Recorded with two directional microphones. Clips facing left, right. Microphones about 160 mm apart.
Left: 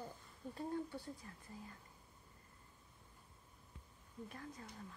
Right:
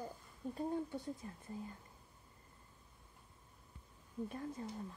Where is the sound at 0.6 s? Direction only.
20° right (ahead or behind).